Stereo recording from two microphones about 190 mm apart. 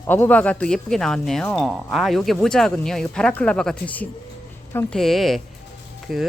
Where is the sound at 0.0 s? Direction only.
10° left (ahead or behind).